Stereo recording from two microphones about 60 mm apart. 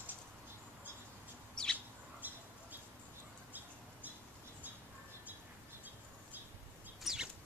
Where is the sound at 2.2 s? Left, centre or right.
Right.